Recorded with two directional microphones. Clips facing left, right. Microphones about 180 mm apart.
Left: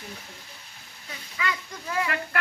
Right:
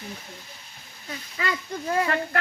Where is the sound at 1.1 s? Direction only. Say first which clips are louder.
Right 2 dB; 35° right (ahead or behind).